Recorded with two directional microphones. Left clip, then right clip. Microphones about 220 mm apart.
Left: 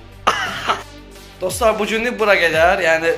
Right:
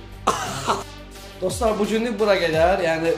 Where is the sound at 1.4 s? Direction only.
Centre (ahead or behind).